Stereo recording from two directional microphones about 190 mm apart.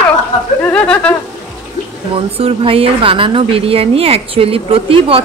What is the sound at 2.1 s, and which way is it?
A woman's voice, 30° right (ahead or behind).